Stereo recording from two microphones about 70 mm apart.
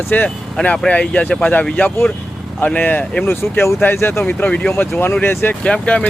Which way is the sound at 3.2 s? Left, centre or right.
Left.